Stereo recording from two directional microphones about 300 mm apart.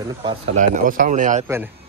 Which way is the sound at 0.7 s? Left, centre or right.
Right.